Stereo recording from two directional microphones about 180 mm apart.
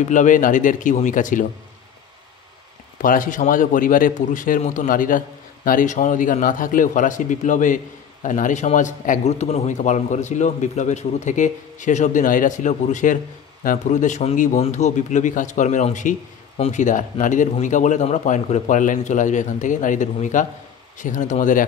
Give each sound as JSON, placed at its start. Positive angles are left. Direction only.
{"t": 0.0, "sound": "a man's voice", "side_deg": 45}
{"t": 3.0, "sound": "a man's voice", "side_deg": 50}